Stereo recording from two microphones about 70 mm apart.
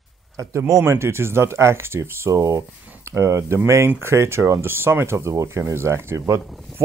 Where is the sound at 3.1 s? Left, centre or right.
Right.